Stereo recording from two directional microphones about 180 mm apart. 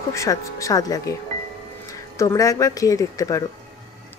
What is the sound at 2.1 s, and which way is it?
Speech, 20° left (ahead or behind).